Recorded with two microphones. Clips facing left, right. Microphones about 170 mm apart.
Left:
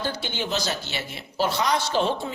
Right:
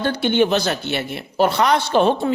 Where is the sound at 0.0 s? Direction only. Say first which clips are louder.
Right 12 dB; 65° right (ahead or behind).